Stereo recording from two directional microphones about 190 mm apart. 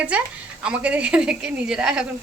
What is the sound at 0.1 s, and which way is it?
A woman's voice, 5° right (ahead or behind).